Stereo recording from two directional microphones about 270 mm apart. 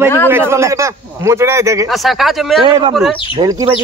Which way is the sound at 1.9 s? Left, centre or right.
Centre.